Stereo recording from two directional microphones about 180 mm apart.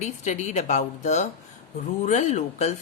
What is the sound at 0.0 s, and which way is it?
Speech, 40° left (ahead or behind).